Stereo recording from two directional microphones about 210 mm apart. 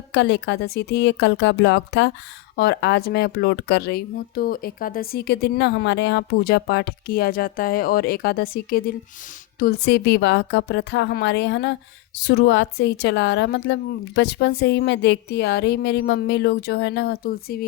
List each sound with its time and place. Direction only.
0.1 s speech: 55° left (ahead or behind)